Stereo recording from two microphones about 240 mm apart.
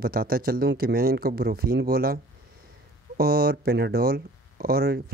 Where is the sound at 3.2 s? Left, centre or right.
Right.